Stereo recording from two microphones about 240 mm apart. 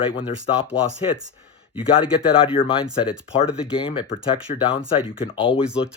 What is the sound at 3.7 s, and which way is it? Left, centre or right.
Speech, left.